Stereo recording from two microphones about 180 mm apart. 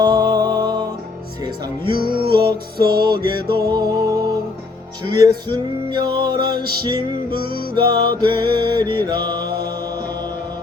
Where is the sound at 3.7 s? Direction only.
20° right (ahead or behind).